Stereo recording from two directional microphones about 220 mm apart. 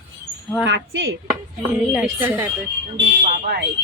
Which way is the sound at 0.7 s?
60° right (ahead or behind).